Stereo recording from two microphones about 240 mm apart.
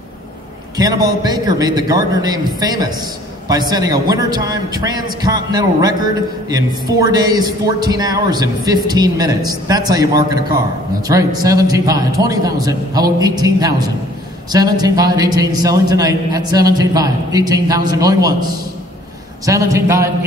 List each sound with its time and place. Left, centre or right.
0.7 s a man's voice: centre
19.4 s a man's voice: centre